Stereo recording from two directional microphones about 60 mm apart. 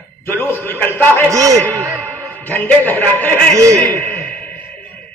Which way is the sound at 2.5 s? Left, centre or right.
Left.